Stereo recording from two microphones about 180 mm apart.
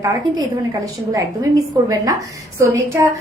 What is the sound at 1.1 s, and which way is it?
A woman's voice, 20° right (ahead or behind).